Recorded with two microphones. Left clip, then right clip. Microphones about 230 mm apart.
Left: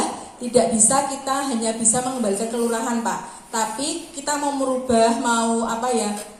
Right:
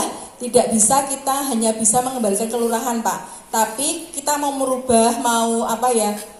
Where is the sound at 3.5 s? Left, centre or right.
Right.